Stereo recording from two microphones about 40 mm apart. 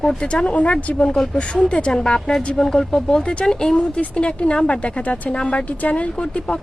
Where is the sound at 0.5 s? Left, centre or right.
Left.